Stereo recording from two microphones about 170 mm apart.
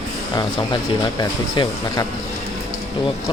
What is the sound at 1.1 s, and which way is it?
Speech, 20° left (ahead or behind).